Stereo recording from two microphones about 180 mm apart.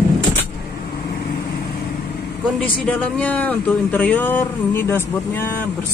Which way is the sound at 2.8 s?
5° left (ahead or behind).